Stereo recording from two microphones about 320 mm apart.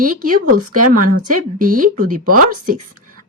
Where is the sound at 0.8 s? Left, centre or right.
Right.